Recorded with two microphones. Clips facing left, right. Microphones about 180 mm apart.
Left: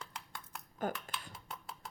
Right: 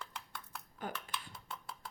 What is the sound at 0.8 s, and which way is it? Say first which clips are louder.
Speech: left 6 dB; 45° left (ahead or behind).